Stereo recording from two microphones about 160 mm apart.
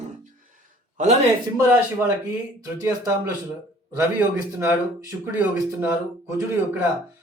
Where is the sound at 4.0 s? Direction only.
10° right (ahead or behind).